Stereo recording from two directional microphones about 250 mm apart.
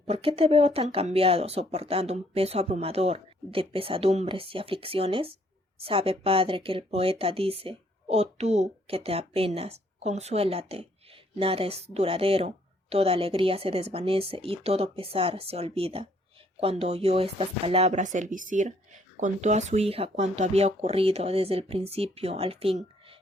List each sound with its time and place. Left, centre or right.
0.1 s speech: right